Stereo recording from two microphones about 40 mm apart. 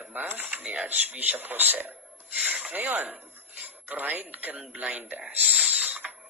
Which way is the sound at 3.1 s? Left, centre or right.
Right.